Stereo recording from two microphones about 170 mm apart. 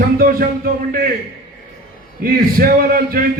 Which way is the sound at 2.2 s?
60° right (ahead or behind).